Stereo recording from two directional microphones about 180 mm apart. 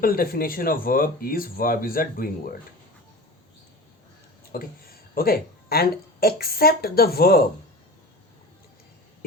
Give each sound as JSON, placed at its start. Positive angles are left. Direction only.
{"t": 0.0, "sound": "speech", "side_deg": 55}
{"t": 4.5, "sound": "a woman's voice", "side_deg": 55}